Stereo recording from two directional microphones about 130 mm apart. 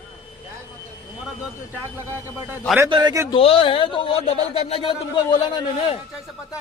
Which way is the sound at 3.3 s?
45° left (ahead or behind).